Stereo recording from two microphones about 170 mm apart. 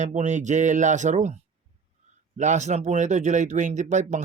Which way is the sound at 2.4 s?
45° right (ahead or behind).